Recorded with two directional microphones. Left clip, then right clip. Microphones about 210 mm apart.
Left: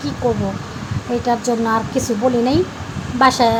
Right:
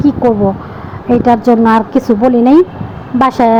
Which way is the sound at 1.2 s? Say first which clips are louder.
Right 9 dB; 30° right (ahead or behind).